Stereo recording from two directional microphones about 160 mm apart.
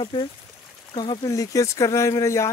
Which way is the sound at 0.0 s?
30° left (ahead or behind).